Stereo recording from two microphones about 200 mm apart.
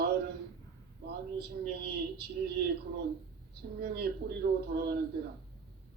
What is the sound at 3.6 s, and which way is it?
Speech, 55° right (ahead or behind).